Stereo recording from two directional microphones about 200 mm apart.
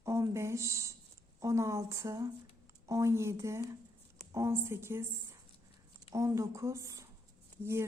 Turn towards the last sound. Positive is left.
turn(degrees=-15)  # may be behind; listen again after turning